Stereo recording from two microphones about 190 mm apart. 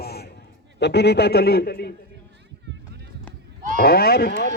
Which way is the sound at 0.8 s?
60° left (ahead or behind).